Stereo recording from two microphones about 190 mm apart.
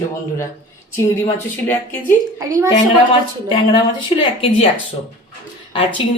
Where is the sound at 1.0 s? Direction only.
15° left (ahead or behind).